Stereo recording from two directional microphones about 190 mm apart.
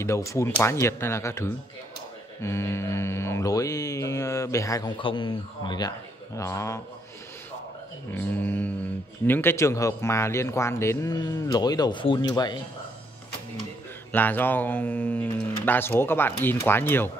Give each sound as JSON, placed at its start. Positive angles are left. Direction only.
{"t": 0.0, "sound": "mantra", "side_deg": 15}
{"t": 8.1, "sound": "mantra", "side_deg": 10}
{"t": 14.1, "sound": "mantra", "side_deg": 10}